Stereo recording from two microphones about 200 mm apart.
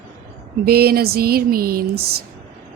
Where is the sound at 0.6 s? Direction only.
50° right (ahead or behind).